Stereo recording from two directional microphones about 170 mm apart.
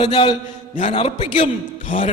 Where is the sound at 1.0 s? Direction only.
40° left (ahead or behind).